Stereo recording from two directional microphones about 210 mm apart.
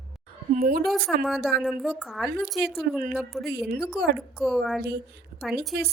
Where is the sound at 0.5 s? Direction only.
45° right (ahead or behind).